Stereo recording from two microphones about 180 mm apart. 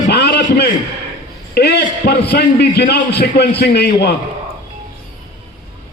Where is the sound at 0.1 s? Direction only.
65° left (ahead or behind).